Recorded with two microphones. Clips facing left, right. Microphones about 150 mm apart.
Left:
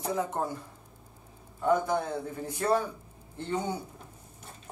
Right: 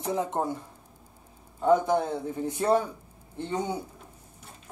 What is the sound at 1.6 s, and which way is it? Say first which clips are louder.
Speech: right 4 dB; 20° right (ahead or behind).